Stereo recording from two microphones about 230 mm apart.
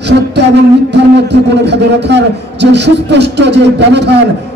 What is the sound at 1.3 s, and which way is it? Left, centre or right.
A man's voice, right.